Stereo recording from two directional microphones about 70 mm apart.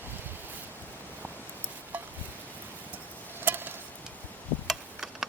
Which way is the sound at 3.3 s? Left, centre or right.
Right.